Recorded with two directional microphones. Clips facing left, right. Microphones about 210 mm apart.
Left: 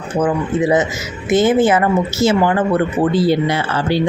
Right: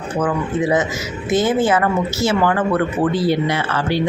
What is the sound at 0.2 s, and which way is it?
Speech, 25° left (ahead or behind).